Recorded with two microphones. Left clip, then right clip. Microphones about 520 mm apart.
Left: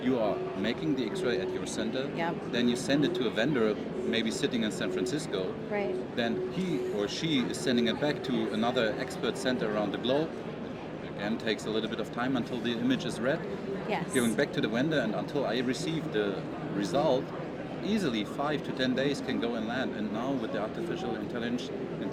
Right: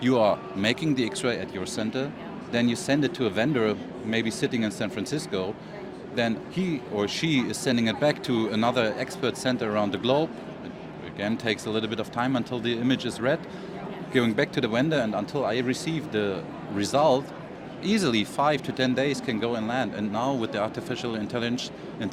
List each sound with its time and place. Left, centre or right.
0.0 s speech: right